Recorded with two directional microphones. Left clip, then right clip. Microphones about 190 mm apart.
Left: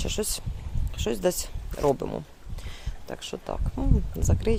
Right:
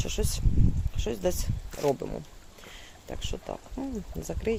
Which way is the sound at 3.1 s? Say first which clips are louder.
Left 3 dB; 20° left (ahead or behind).